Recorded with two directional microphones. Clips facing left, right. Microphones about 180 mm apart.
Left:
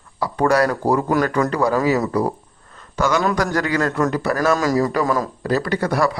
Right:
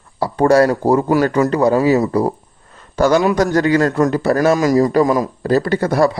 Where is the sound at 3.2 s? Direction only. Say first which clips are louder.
Right 6 dB; 15° right (ahead or behind).